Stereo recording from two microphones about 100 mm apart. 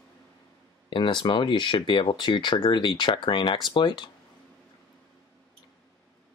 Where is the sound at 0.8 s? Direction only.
55° left (ahead or behind).